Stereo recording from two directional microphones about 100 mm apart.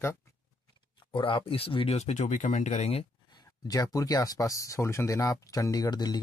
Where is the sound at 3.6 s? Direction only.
35° left (ahead or behind).